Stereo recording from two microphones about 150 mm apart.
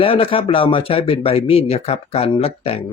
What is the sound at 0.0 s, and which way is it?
Speech, 40° left (ahead or behind).